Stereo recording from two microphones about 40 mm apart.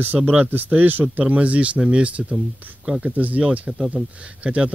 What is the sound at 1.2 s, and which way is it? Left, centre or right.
Speech, right.